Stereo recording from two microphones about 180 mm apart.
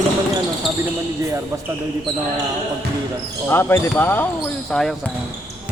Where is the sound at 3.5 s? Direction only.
10° left (ahead or behind).